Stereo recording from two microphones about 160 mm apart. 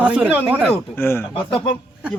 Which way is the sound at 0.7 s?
15° left (ahead or behind).